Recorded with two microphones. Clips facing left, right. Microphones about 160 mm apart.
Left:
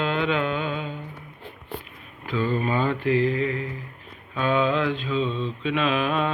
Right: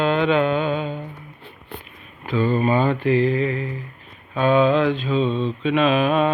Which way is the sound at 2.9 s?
20° right (ahead or behind).